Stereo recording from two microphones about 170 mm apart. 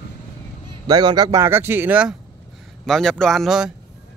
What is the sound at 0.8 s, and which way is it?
Speech, 25° right (ahead or behind).